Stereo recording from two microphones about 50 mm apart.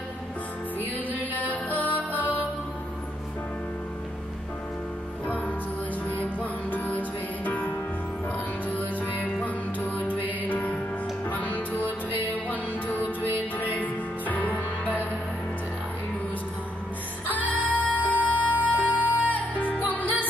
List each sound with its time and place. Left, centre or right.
1.3 s music: left
6.0 s music: left
17.3 s music: left